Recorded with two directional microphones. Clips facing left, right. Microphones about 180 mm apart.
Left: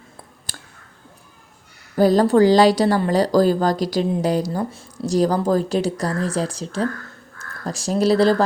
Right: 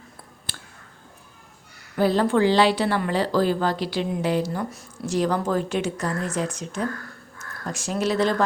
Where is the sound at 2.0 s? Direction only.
40° left (ahead or behind).